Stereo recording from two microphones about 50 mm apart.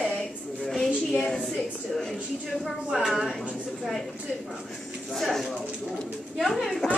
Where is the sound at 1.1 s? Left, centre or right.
Centre.